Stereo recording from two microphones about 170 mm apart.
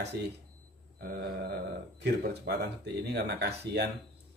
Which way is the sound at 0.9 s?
60° right (ahead or behind).